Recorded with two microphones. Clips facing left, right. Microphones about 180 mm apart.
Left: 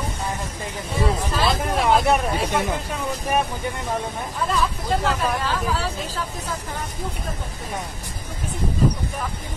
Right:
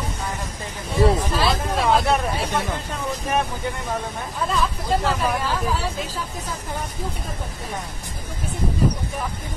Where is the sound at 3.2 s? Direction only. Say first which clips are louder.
Left 1 dB; 15° left (ahead or behind).